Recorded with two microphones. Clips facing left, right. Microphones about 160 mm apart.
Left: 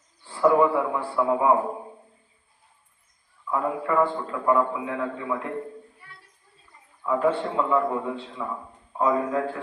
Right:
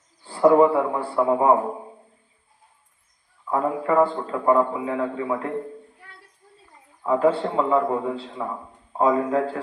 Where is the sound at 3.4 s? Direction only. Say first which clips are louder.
Right 3 dB; 35° right (ahead or behind).